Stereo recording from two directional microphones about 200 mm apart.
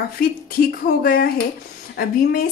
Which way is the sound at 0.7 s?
50° left (ahead or behind).